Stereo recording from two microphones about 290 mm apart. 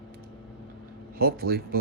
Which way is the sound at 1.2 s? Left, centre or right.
Right.